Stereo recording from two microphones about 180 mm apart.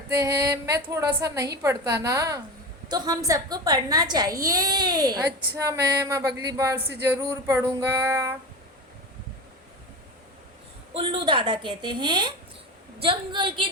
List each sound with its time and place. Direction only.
0.2 s a woman's voice: 20° right (ahead or behind)
7.1 s female singing: 15° right (ahead or behind)
10.9 s a woman's voice: 30° right (ahead or behind)